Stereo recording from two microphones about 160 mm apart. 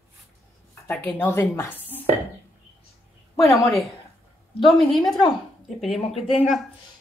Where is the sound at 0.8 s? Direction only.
15° left (ahead or behind).